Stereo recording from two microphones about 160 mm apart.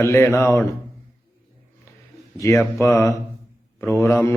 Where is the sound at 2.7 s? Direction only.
20° left (ahead or behind).